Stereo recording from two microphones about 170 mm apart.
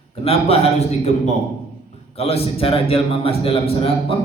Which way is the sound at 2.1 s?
35° left (ahead or behind).